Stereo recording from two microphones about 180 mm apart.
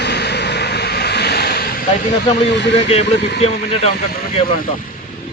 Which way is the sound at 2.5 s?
75° left (ahead or behind).